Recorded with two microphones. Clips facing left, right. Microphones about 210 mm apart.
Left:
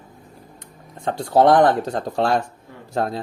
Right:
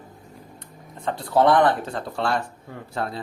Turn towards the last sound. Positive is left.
turn(degrees=40)  # may be behind; listen again after turning